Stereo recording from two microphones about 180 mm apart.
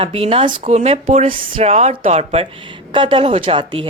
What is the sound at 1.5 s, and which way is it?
Speech, 35° right (ahead or behind).